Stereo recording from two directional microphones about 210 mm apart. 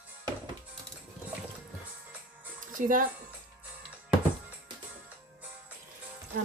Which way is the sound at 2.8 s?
40° right (ahead or behind).